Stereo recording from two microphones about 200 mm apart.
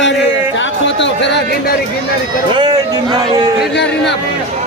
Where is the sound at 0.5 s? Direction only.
65° left (ahead or behind).